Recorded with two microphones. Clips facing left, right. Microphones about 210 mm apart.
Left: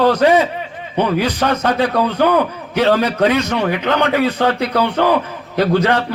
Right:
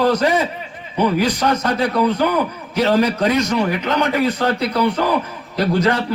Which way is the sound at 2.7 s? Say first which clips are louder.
Left 1 dB; 60° left (ahead or behind).